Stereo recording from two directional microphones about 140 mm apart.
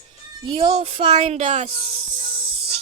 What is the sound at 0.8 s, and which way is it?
Speech, 40° right (ahead or behind).